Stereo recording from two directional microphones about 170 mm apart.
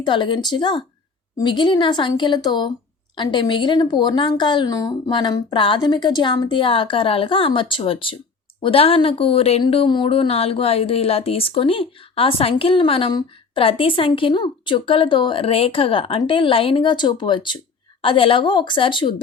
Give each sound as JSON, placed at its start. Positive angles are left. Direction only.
{"t": 0.0, "sound": "a woman's voice", "side_deg": 30}